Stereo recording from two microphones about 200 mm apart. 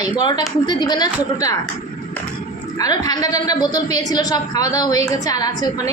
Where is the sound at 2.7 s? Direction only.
20° left (ahead or behind).